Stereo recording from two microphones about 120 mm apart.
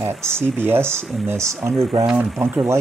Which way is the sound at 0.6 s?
20° right (ahead or behind).